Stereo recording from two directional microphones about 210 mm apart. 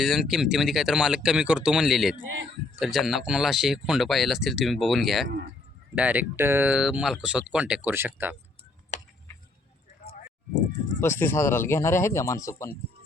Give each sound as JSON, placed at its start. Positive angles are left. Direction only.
{"t": 0.0, "sound": "speech", "side_deg": 0}
{"t": 8.9, "sound": "tick", "side_deg": 35}
{"t": 11.0, "sound": "speech", "side_deg": 10}